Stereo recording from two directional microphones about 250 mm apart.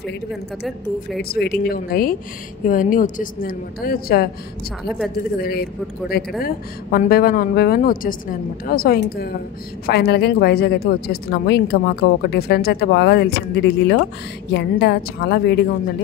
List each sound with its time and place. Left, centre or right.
1.3 s speech: left
4.8 s a woman's voice: centre
5.4 s speech: left